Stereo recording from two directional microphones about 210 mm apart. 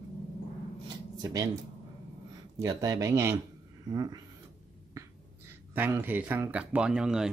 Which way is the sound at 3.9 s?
20° right (ahead or behind).